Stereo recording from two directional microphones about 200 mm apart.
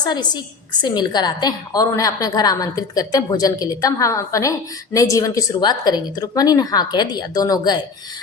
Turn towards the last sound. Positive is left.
turn(degrees=20)  # may be behind; listen again after turning